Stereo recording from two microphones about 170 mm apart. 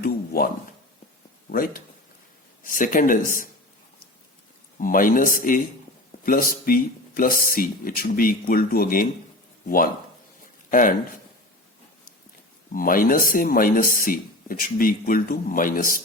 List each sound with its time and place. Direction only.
0.0 s a sound: 60° left (ahead or behind)
1.5 s speech: 55° left (ahead or behind)
4.8 s speech: 55° left (ahead or behind)
12.7 s speech: 55° left (ahead or behind)